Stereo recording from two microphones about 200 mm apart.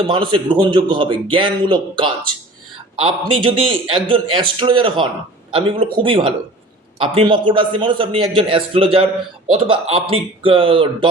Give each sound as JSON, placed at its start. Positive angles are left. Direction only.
{"t": 0.1, "sound": "a man's voice", "side_deg": -25}